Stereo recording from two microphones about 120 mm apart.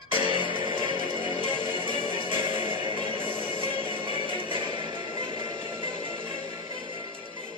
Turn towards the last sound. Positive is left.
turn(degrees=-45)  # may be behind; listen again after turning